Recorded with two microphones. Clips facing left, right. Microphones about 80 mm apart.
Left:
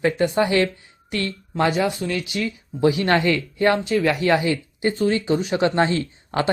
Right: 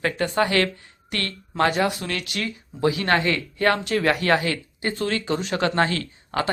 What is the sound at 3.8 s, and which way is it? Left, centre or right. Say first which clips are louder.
Speech: left 1 dB; right.